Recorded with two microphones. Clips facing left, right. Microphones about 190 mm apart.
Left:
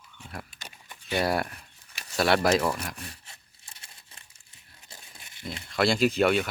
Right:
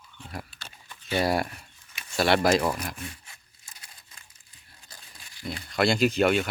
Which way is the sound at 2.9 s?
35° left (ahead or behind).